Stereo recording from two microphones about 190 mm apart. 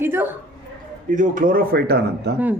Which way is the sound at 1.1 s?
45° right (ahead or behind).